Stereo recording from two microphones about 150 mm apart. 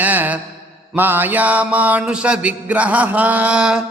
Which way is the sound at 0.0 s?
10° right (ahead or behind).